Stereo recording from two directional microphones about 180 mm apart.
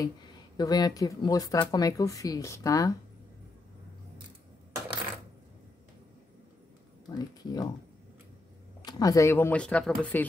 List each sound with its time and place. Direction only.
0.6 s speech: 20° left (ahead or behind)
7.1 s speech: 20° left (ahead or behind)
8.8 s speech: 20° left (ahead or behind)